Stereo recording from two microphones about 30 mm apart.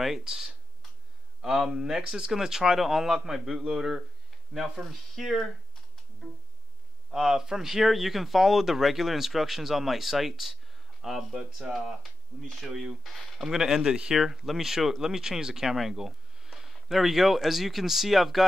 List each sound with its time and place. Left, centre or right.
0.2 s speech: centre
5.2 s speech: centre
7.1 s speech: centre
12.6 s speech: centre
13.8 s speech: right
14.1 s speech: centre
16.0 s a sound: centre
16.9 s speech: centre